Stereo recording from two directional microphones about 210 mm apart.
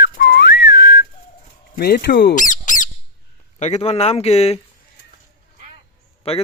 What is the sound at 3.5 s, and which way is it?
Speech, 35° left (ahead or behind).